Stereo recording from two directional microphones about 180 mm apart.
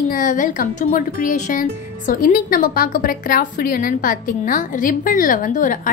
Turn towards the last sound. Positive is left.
turn(degrees=45)  # may be behind; listen again after turning